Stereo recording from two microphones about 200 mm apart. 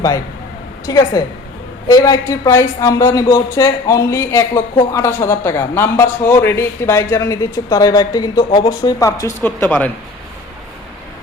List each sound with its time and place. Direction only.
0.9 s a man's voice: 20° left (ahead or behind)